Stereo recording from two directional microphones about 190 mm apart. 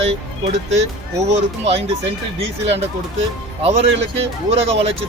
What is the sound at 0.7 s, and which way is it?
Speech, 35° right (ahead or behind).